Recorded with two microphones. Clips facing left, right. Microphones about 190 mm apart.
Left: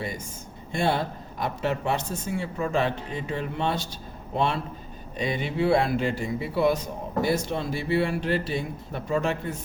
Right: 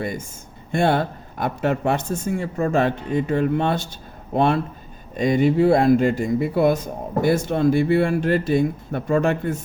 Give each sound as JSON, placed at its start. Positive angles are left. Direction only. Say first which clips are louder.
{"t": 0.7, "sound": "speech", "louder": "right 6 dB", "side_deg": -55}